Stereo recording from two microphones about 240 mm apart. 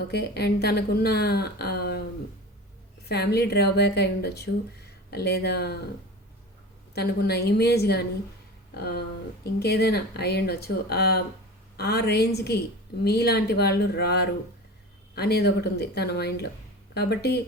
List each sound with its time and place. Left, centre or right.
0.1 s speech: left
3.1 s speech: left
6.9 s speech: left